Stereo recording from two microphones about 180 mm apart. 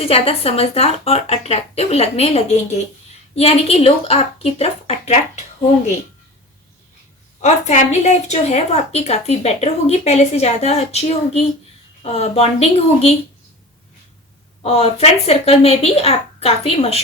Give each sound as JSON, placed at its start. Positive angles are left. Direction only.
{"t": 0.0, "sound": "a woman's voice", "side_deg": 35}
{"t": 7.4, "sound": "a woman's voice", "side_deg": 40}
{"t": 14.6, "sound": "a woman's voice", "side_deg": 35}